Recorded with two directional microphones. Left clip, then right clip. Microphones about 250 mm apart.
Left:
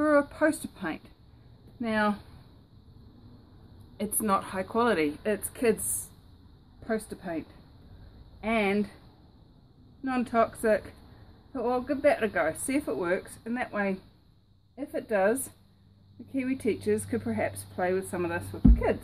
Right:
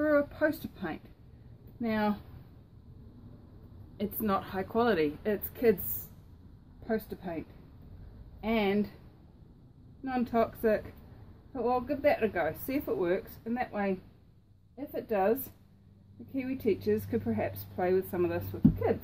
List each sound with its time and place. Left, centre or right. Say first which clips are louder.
0.0 s a woman's voice: left 3 dB; centre
3.9 s a woman's voice: left 4 dB; centre
6.8 s a woman's voice: left 2 dB; centre
10.0 s a woman's voice: left 3 dB; centre